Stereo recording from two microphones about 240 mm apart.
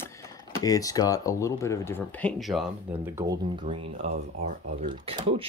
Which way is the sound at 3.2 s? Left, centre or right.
Centre.